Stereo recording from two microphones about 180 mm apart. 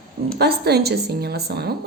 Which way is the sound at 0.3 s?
65° right (ahead or behind).